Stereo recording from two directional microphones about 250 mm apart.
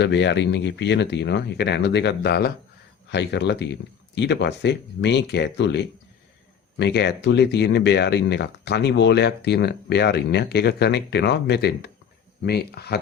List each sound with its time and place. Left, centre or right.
0.0 s speech: left